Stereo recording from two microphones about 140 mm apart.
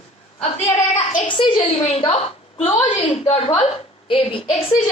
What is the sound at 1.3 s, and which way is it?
A woman's voice, 35° left (ahead or behind).